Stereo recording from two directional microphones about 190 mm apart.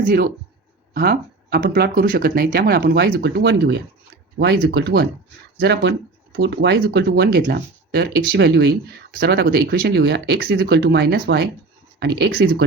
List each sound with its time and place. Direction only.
0.0 s a man's voice: 45° right (ahead or behind)